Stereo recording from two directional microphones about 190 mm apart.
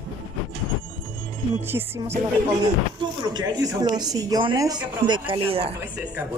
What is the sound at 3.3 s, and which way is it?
Speech, 20° right (ahead or behind).